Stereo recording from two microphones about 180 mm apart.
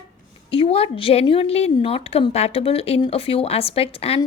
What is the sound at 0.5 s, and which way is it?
Speech, 30° left (ahead or behind).